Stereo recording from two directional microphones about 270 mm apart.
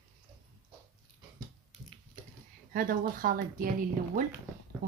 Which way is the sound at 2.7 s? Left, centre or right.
Right.